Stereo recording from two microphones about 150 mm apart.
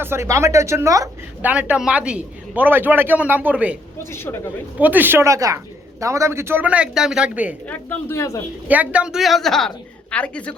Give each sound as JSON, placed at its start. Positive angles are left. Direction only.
{"t": 0.0, "sound": "speech", "side_deg": -15}
{"t": 1.4, "sound": "a man's voice", "side_deg": -10}
{"t": 4.1, "sound": "a woman's voice", "side_deg": 15}
{"t": 4.8, "sound": "a man's voice", "side_deg": -10}
{"t": 7.7, "sound": "a woman's voice", "side_deg": 15}
{"t": 8.6, "sound": "a woman's voice", "side_deg": -10}